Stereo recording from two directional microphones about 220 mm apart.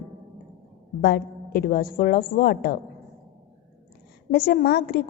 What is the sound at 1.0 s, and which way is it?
A woman's voice, 45° left (ahead or behind).